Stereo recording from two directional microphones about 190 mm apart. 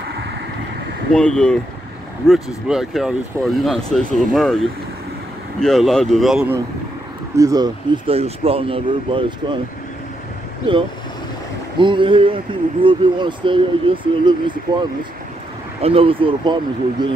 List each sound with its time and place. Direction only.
1.1 s speech: 5° left (ahead or behind)
7.3 s speech: 20° right (ahead or behind)
10.6 s speech: 25° right (ahead or behind)